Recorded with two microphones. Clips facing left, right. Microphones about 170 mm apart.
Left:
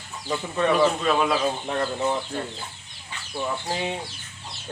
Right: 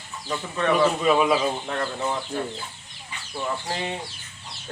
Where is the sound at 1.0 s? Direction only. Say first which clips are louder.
Right 2 dB; 5° right (ahead or behind).